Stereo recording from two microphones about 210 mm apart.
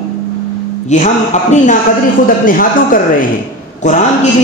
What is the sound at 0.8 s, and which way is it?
A man's voice, 35° left (ahead or behind).